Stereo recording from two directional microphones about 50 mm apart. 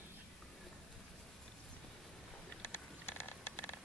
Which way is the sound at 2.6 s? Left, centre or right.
Left.